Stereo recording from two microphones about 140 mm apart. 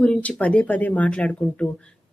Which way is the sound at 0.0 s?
10° left (ahead or behind).